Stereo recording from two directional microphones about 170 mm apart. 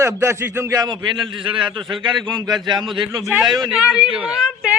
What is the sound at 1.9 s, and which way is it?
Speech, 30° right (ahead or behind).